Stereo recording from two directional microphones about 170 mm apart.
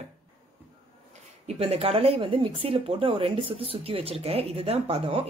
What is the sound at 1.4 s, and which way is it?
Speech, 35° right (ahead or behind).